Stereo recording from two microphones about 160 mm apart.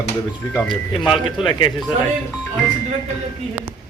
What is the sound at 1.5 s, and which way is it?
Speech, 30° left (ahead or behind).